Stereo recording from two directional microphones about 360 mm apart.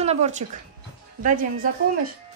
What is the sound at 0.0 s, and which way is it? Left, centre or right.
Speech, centre.